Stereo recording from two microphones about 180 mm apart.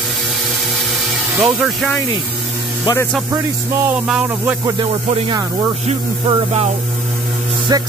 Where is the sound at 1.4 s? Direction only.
10° right (ahead or behind).